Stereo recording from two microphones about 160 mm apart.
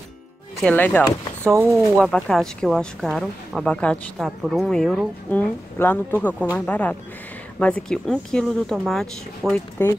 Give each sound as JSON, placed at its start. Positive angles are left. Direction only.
{"t": 0.6, "sound": "speech", "side_deg": 10}
{"t": 1.4, "sound": "speech", "side_deg": -15}
{"t": 2.0, "sound": "speech", "side_deg": 5}